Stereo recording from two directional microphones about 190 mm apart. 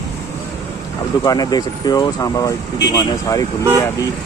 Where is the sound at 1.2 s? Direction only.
20° left (ahead or behind).